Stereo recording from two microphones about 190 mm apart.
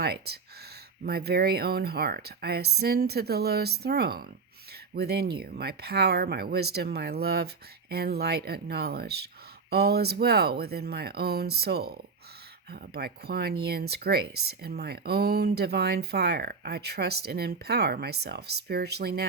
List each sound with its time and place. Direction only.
0.0 s speech: 55° right (ahead or behind)